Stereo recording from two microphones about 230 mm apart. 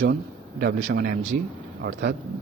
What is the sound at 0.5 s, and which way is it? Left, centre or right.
A man's voice, right.